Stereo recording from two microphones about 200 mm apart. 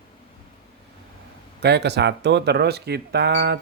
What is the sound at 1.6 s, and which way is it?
Speech, 55° right (ahead or behind).